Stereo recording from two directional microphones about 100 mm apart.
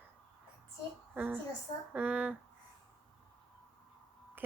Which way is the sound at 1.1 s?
20° right (ahead or behind).